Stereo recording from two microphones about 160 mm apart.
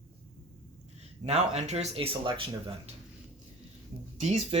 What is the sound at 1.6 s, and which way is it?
Speech, 45° right (ahead or behind).